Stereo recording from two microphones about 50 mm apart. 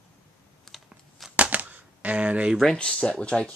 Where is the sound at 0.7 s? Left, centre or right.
Centre.